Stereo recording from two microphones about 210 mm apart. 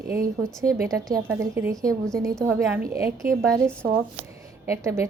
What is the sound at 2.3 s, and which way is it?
Speech, centre (ahead or behind).